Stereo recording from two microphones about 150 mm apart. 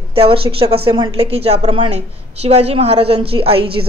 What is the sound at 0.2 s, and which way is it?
A woman's voice, 35° right (ahead or behind).